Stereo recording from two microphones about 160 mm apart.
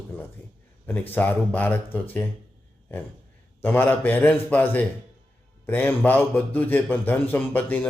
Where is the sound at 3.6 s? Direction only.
10° left (ahead or behind).